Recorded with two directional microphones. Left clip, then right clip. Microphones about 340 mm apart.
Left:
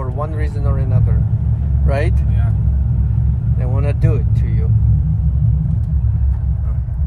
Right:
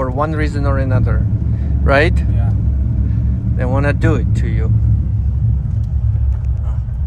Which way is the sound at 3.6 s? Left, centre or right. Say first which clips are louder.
Right 8 dB; right.